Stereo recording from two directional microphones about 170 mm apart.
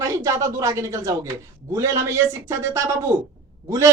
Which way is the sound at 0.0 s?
20° right (ahead or behind).